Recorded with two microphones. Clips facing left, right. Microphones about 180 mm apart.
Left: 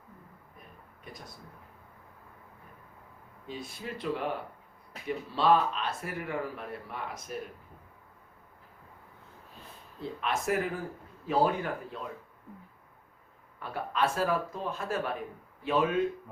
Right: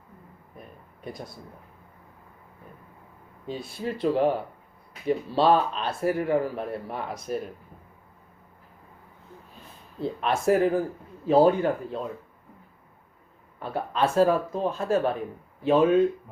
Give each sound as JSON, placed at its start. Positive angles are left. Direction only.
{"t": 3.4, "sound": "speech", "side_deg": -30}
{"t": 10.0, "sound": "speech", "side_deg": -35}
{"t": 13.6, "sound": "speech", "side_deg": -30}